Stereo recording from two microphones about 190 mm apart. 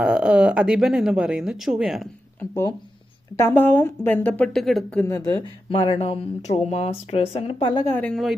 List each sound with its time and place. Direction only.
0.0 s speech: 5° right (ahead or behind)
2.4 s speech: 15° left (ahead or behind)
5.0 s speech: 15° left (ahead or behind)
5.6 s speech: 25° left (ahead or behind)
7.9 s speech: 10° left (ahead or behind)